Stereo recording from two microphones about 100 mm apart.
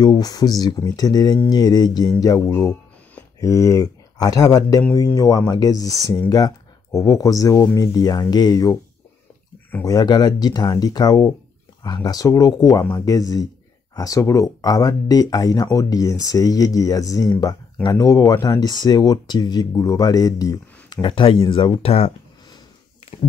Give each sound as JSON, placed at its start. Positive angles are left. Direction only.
{"t": 0.0, "sound": "speech", "side_deg": 45}
{"t": 9.8, "sound": "speech", "side_deg": 45}
{"t": 21.0, "sound": "speech", "side_deg": 55}